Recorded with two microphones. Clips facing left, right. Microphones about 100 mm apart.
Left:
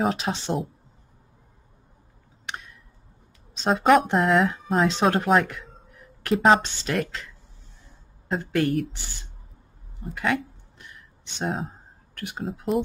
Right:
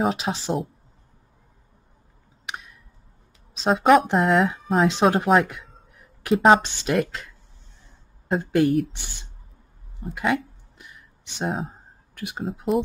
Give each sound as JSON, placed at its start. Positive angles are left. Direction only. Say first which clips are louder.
{"t": 0.0, "sound": "speech", "louder": "right 1 dB", "side_deg": 0}
{"t": 2.4, "sound": "tick", "louder": "right 1 dB", "side_deg": -5}
{"t": 3.5, "sound": "speech", "louder": "right 2 dB", "side_deg": 0}
{"t": 6.6, "sound": "a woman's voice", "louder": "right 4 dB", "side_deg": -15}
{"t": 8.3, "sound": "a woman's voice", "louder": "right 4 dB", "side_deg": -10}
{"t": 10.1, "sound": "a sound", "louder": "right 2 dB", "side_deg": -5}
{"t": 11.3, "sound": "speech", "louder": "right 1 dB", "side_deg": 0}